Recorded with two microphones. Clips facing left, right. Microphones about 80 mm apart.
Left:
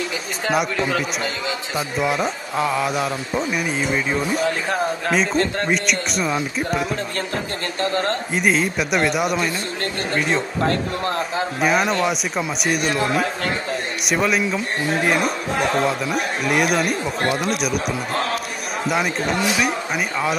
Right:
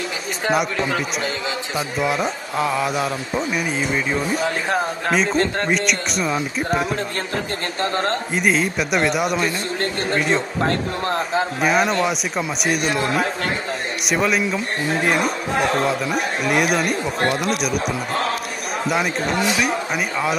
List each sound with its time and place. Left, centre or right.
0.5 s speech: centre
2.0 s speech: centre
7.8 s a man's voice: right
8.3 s speech: centre
11.6 s speech: centre